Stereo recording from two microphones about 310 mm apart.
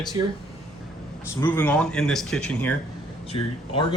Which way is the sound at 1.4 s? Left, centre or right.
Centre.